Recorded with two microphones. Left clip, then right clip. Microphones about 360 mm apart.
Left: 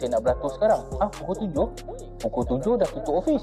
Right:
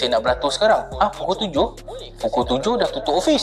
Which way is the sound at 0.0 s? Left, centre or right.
Centre.